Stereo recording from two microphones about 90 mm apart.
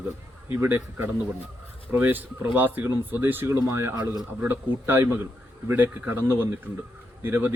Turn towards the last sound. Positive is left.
turn(degrees=-20)  # may be behind; listen again after turning